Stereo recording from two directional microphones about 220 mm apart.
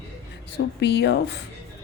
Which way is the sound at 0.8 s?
50° left (ahead or behind).